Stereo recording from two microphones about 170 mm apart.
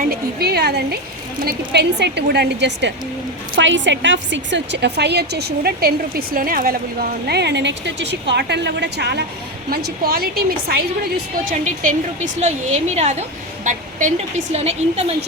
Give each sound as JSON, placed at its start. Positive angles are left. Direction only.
{"t": 0.1, "sound": "a woman's voice", "side_deg": -65}
{"t": 1.5, "sound": "a woman's voice", "side_deg": -85}
{"t": 9.6, "sound": "a woman's voice", "side_deg": -65}
{"t": 11.6, "sound": "a woman's voice", "side_deg": -50}